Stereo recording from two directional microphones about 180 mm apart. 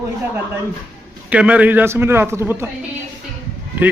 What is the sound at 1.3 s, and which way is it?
A man's voice, 5° right (ahead or behind).